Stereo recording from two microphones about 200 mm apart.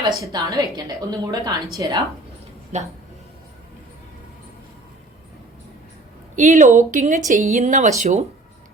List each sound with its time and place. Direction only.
0.0 s a woman's voice: 15° right (ahead or behind)
2.7 s speech: 35° right (ahead or behind)
6.3 s speech: 40° right (ahead or behind)